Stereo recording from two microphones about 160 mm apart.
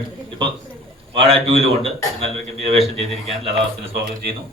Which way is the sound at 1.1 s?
35° right (ahead or behind).